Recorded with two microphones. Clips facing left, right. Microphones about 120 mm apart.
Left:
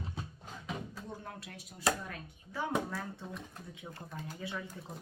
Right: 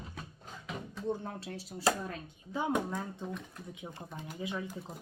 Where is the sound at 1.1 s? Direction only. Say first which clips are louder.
Right 9 dB; 30° right (ahead or behind).